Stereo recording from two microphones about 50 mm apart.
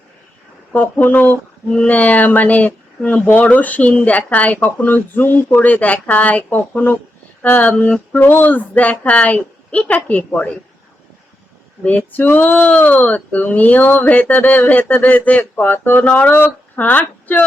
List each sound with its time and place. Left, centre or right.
0.7 s speech: left
7.8 s a sound: left
8.2 s speech: left
11.8 s speech: left